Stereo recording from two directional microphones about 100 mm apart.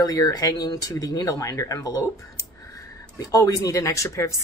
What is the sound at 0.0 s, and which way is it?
Speech, 40° left (ahead or behind).